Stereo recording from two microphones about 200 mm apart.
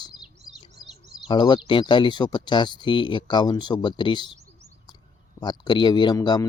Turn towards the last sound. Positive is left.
turn(degrees=20)  # may be behind; listen again after turning